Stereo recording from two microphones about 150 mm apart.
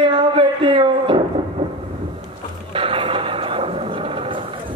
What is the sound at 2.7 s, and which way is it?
Neigh, 35° right (ahead or behind).